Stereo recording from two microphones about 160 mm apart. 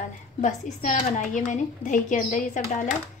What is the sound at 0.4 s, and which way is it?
A woman's voice, 50° left (ahead or behind).